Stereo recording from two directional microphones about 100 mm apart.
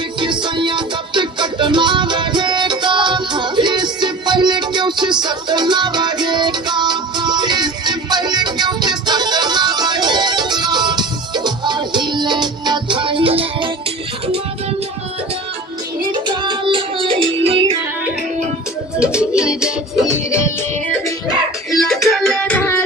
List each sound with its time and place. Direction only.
0.2 s music: 50° right (ahead or behind)
16.1 s music: 50° right (ahead or behind); by 17.7 s 70° right (ahead or behind)
18.9 s music: 10° right (ahead or behind)
21.7 s music: 5° left (ahead or behind)
22.5 s music: 20° left (ahead or behind)